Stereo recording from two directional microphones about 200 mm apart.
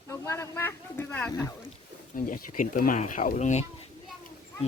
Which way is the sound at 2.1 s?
45° left (ahead or behind).